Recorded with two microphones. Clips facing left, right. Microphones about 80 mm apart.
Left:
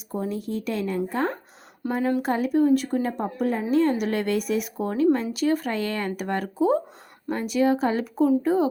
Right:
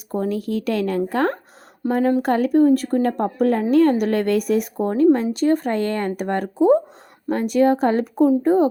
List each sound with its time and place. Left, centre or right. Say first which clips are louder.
0.1 s speech: right 6 dB; right
1.9 s a woman's voice: right 6 dB; right